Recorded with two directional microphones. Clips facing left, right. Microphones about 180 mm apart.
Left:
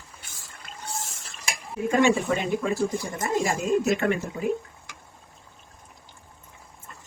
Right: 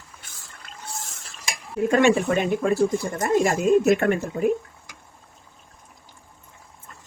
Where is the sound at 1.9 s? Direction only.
65° right (ahead or behind); by 4.4 s 50° right (ahead or behind).